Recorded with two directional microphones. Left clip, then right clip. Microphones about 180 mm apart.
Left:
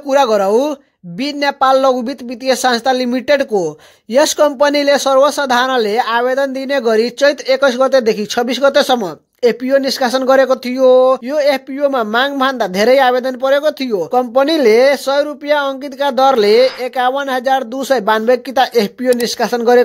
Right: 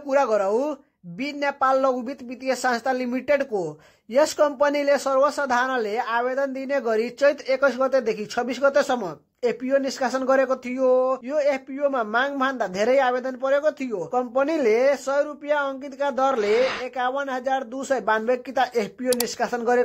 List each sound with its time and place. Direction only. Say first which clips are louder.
0.1 s speech: left 9 dB; 40° left (ahead or behind)